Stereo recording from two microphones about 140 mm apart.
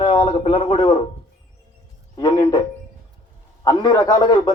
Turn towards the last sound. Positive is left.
turn(degrees=30)  # may be behind; listen again after turning